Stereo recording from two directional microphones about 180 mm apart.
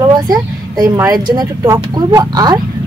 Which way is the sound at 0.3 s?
20° right (ahead or behind).